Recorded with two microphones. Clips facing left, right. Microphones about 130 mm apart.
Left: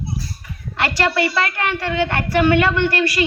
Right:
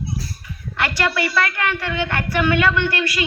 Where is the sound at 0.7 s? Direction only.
30° left (ahead or behind).